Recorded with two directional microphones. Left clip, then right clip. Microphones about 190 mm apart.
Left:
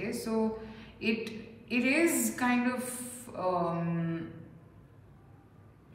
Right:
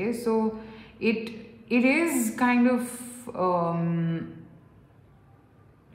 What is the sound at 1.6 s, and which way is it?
A woman's voice, 30° right (ahead or behind).